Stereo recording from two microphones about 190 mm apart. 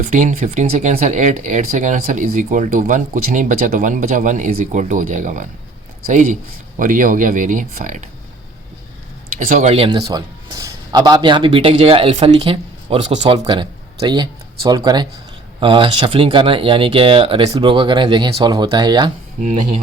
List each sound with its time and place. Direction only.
0.0 s speech: 40° right (ahead or behind)
6.7 s speech: 45° right (ahead or behind)
9.5 s a man's voice: 40° right (ahead or behind); by 19.1 s 20° right (ahead or behind)